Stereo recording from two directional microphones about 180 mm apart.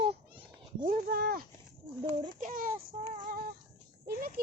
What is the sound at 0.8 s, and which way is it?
A child's voice, 50° right (ahead or behind).